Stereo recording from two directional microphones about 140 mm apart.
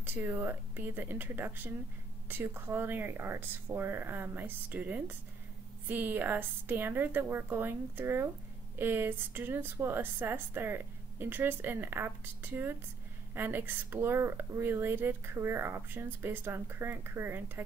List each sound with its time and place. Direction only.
0.0 s speech: 15° right (ahead or behind)